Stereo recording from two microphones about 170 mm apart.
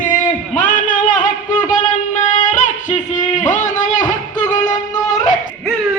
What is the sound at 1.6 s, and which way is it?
Music, 45° left (ahead or behind).